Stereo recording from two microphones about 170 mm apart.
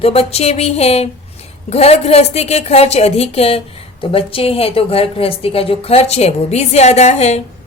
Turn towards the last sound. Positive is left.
turn(degrees=40)  # may be behind; listen again after turning